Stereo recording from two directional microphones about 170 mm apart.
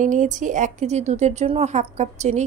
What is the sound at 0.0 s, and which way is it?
A woman's voice, 50° right (ahead or behind).